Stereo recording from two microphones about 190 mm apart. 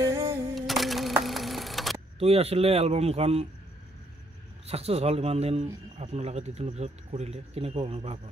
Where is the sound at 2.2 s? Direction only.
30° right (ahead or behind).